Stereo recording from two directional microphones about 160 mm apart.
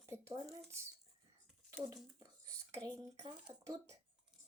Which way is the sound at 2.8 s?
25° right (ahead or behind).